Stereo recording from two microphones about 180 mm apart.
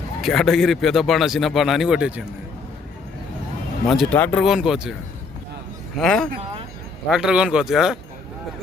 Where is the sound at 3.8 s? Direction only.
Centre (ahead or behind).